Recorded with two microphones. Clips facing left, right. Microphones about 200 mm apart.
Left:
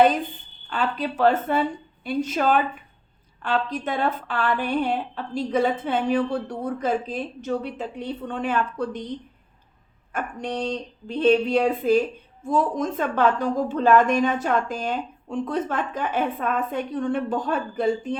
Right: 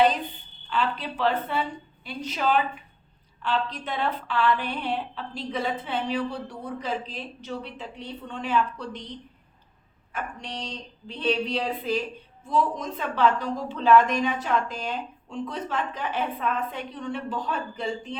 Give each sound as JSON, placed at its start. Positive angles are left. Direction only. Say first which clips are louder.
{"t": 0.7, "sound": "a woman's voice", "louder": "left 2 dB", "side_deg": 45}
{"t": 10.1, "sound": "a woman's voice", "louder": "left 6 dB", "side_deg": 50}